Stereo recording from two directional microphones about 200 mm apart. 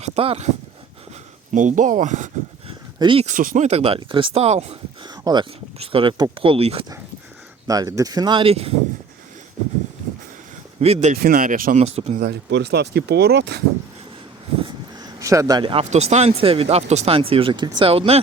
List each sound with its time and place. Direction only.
0.0 s speech: 30° right (ahead or behind)
1.5 s speech: 40° right (ahead or behind)
3.3 s speech: 40° right (ahead or behind)
5.0 s speech: 20° right (ahead or behind)
7.7 s speech: 15° right (ahead or behind)
10.8 s speech: 30° right (ahead or behind)
12.2 s speech: 60° right (ahead or behind)
14.6 s speech: 20° right (ahead or behind)